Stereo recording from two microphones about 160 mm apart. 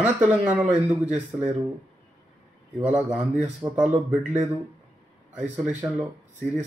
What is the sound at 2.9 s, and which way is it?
Speech, 5° right (ahead or behind).